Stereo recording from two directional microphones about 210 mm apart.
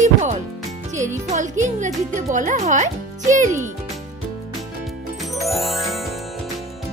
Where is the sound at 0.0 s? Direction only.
35° right (ahead or behind).